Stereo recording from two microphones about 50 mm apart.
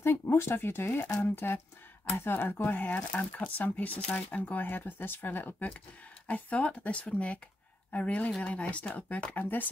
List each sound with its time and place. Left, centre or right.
0.0 s speech: left
4.6 s speech: left
6.2 s speech: left